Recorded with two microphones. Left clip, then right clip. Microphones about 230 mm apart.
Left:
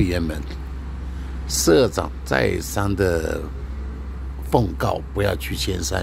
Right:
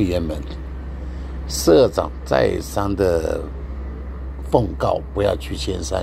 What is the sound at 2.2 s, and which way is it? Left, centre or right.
Speech, left.